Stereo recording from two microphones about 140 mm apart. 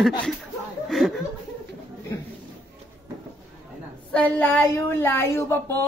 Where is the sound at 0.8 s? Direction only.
Centre (ahead or behind).